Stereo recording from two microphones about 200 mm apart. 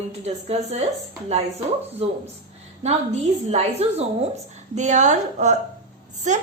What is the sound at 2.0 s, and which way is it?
Speech, 30° right (ahead or behind).